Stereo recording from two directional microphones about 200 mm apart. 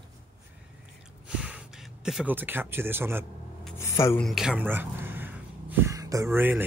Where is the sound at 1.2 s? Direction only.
5° right (ahead or behind).